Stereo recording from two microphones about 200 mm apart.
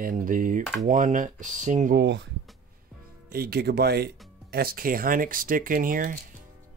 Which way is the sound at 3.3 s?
50° right (ahead or behind).